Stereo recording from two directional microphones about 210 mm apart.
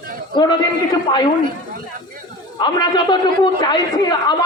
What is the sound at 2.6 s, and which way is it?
A man's voice, 20° left (ahead or behind).